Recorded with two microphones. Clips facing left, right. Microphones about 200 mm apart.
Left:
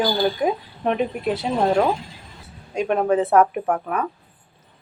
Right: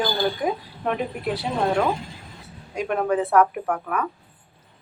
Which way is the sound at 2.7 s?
25° left (ahead or behind).